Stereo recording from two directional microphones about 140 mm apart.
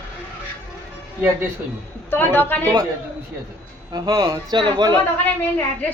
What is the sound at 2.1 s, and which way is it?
Speech, 15° left (ahead or behind).